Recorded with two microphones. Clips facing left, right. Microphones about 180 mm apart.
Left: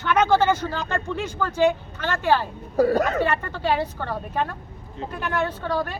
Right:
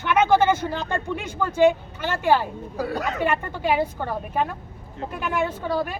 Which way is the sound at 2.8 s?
40° left (ahead or behind).